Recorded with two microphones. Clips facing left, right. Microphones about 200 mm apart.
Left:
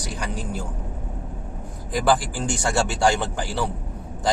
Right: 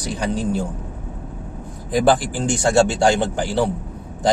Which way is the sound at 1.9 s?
20° right (ahead or behind).